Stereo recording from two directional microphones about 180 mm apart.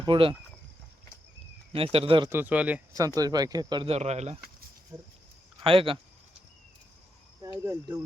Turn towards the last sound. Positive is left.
turn(degrees=-15)  # may be behind; listen again after turning